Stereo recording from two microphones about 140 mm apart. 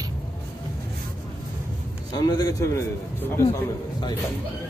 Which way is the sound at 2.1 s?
30° left (ahead or behind).